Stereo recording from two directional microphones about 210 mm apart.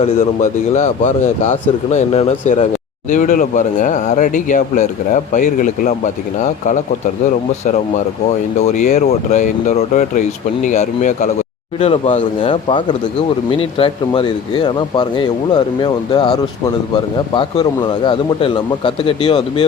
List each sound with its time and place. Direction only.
0.7 s speech: 35° left (ahead or behind)
8.5 s speech: 35° left (ahead or behind)